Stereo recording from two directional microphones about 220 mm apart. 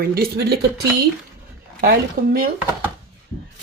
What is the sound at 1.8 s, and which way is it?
Speech, 45° right (ahead or behind).